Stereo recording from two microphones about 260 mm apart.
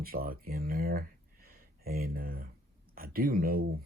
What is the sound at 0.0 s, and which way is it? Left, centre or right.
Speech, right.